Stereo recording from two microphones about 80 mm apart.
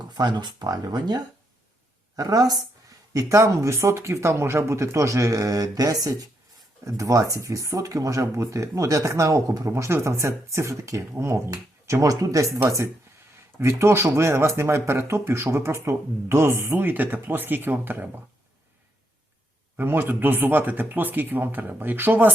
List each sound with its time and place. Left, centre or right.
0.1 s speech: right
2.1 s speech: right
6.8 s speech: right
11.5 s speech: right
19.7 s speech: right